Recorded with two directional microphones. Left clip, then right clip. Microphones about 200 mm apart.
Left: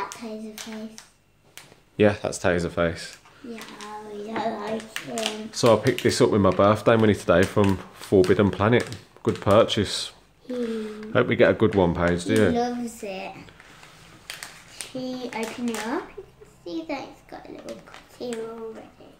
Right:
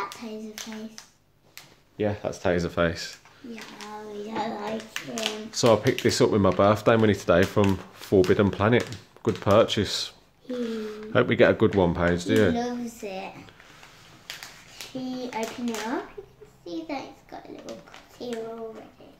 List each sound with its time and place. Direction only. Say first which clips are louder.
2.0 s speech: left 7 dB; 30° left (ahead or behind)
2.7 s speech: even; 10° right (ahead or behind)
15.0 s a child's voice: left 1 dB; 10° left (ahead or behind)